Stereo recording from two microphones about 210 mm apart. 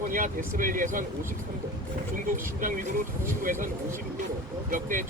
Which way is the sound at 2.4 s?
40° right (ahead or behind).